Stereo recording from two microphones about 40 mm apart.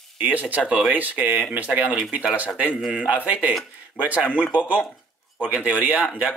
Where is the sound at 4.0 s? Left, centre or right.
Left.